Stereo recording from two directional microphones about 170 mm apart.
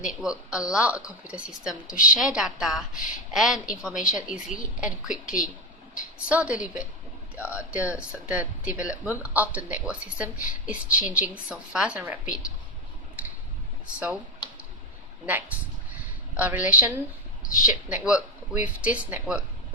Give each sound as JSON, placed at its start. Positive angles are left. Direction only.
{"t": 0.0, "sound": "a woman's voice", "side_deg": -5}
{"t": 13.2, "sound": "a sound", "side_deg": -10}
{"t": 13.8, "sound": "speech", "side_deg": -5}
{"t": 15.3, "sound": "speech", "side_deg": -10}
{"t": 17.4, "sound": "a sound", "side_deg": 50}
{"t": 17.8, "sound": "speech", "side_deg": -5}